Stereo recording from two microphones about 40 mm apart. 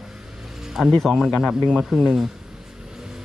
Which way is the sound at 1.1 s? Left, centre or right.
Centre.